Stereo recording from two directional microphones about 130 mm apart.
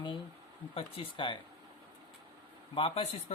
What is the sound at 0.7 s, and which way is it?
Speech, 45° left (ahead or behind).